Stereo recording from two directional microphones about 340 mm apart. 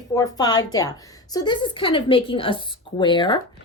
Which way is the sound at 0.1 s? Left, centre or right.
Centre.